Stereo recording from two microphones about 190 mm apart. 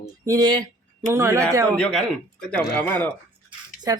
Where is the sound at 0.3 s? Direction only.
20° right (ahead or behind).